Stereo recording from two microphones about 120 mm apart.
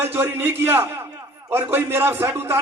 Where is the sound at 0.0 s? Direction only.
20° right (ahead or behind).